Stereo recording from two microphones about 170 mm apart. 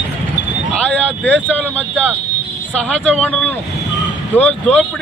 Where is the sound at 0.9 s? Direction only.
10° left (ahead or behind).